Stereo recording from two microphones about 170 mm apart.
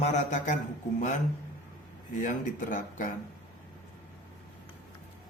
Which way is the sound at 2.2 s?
50° left (ahead or behind).